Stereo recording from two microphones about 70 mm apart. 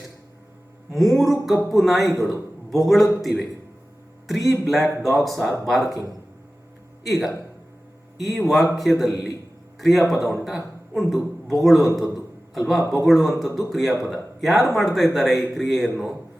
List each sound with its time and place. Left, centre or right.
0.9 s a man's voice: centre
7.0 s a man's voice: centre